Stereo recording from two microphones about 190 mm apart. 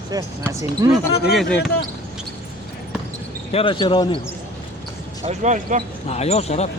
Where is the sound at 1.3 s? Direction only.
5° left (ahead or behind).